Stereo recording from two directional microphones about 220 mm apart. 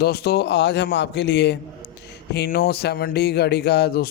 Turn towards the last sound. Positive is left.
turn(degrees=45)  # may be behind; listen again after turning